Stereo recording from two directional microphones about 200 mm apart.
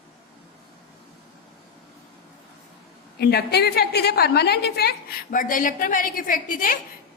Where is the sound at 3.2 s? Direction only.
55° left (ahead or behind).